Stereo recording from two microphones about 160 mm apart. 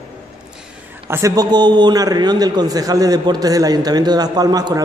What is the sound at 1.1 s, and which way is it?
A man's voice, 20° right (ahead or behind).